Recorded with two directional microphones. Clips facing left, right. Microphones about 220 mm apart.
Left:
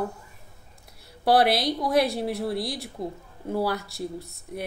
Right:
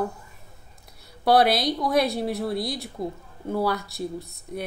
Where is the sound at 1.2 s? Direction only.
30° left (ahead or behind).